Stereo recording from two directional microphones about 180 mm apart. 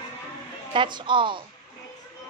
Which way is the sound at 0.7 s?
25° right (ahead or behind).